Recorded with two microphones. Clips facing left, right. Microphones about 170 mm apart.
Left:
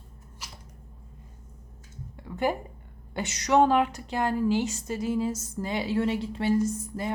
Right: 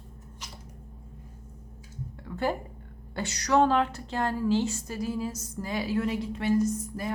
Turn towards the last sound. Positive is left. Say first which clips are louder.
# even
turn(degrees=25)  # may be behind; listen again after turning